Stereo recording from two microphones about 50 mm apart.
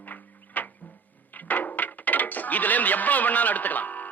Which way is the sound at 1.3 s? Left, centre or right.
Left.